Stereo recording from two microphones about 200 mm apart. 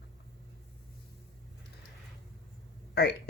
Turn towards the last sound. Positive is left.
turn(degrees=55)  # may be behind; listen again after turning